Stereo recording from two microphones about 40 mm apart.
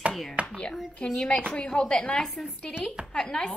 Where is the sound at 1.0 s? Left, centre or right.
Centre.